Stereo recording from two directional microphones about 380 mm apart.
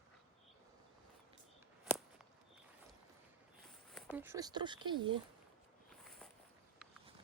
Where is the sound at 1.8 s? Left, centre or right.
Centre.